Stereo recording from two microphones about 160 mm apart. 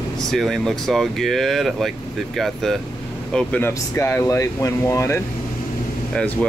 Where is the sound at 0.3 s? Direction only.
Centre (ahead or behind).